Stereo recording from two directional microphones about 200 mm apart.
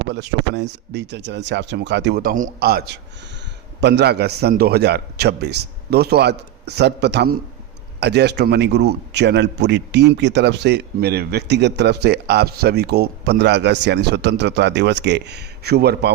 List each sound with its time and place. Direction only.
0.1 s a man's voice: 60° right (ahead or behind)